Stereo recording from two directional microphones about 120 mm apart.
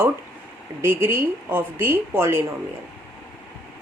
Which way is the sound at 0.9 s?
20° right (ahead or behind).